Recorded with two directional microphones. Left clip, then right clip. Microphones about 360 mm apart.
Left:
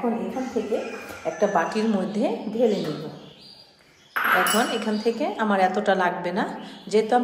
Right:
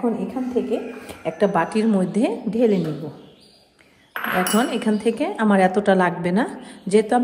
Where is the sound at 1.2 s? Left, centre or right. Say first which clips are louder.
Right 2 dB; right.